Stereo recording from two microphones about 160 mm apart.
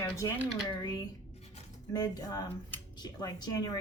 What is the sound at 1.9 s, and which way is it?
Speech, 25° left (ahead or behind).